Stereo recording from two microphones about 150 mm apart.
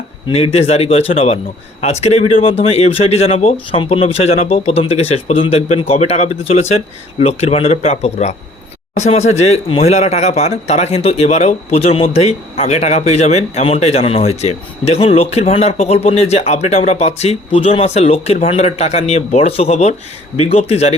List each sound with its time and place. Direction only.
0.3 s speech: 40° left (ahead or behind)